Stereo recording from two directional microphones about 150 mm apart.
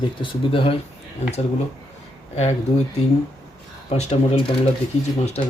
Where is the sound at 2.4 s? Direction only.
45° left (ahead or behind).